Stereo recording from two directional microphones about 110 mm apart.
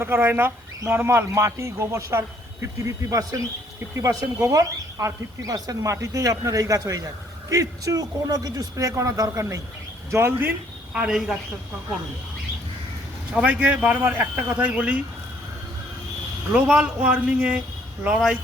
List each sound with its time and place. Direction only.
0.0 s a man's voice: 20° right (ahead or behind)
10.9 s speech: 5° right (ahead or behind)
13.3 s speech: 15° right (ahead or behind)
16.5 s speech: 10° right (ahead or behind)